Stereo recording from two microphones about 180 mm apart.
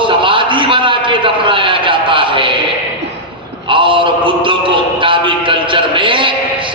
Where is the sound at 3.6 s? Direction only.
30° right (ahead or behind).